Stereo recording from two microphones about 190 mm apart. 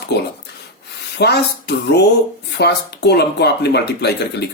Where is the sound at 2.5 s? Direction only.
60° left (ahead or behind).